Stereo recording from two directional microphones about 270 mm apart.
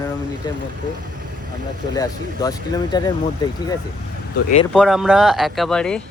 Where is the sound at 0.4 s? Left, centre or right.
Centre.